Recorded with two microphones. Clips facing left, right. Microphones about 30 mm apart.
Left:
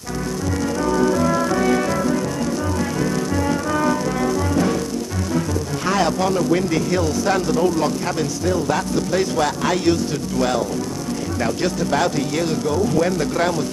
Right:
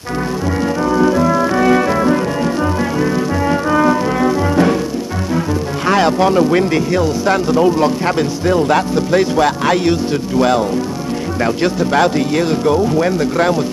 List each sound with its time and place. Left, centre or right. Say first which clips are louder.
0.8 s music: right 5 dB; right
5.9 s speech: right 7 dB; right
6.9 s speech: right 5 dB; centre